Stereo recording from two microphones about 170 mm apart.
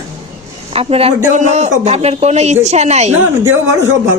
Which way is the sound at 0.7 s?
35° right (ahead or behind).